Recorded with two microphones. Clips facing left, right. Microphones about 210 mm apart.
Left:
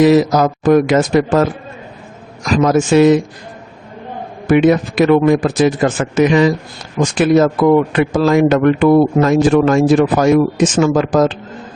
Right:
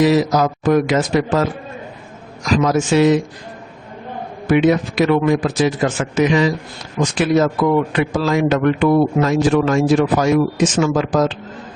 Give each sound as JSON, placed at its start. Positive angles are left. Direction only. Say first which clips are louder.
{"t": 0.0, "sound": "a man's voice", "louder": "left 4 dB", "side_deg": 50}
{"t": 2.6, "sound": "a man's voice", "louder": "left 5 dB", "side_deg": 50}
{"t": 4.4, "sound": "a man's voice", "louder": "left 3 dB", "side_deg": 50}